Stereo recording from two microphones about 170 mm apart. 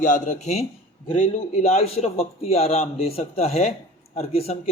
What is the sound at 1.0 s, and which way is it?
Speech, 30° left (ahead or behind).